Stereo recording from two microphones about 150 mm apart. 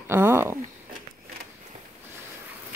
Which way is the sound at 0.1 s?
15° right (ahead or behind).